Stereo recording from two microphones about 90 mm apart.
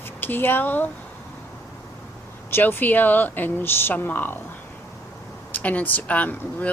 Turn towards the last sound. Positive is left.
turn(degrees=15)  # may be behind; listen again after turning